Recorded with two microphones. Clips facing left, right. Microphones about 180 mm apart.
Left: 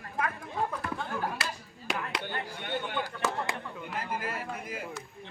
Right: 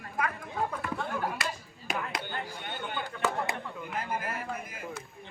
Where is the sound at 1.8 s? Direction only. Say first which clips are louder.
Even; 70° left (ahead or behind).